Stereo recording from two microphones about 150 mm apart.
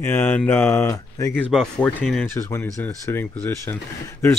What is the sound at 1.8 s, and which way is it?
Speech, 5° left (ahead or behind).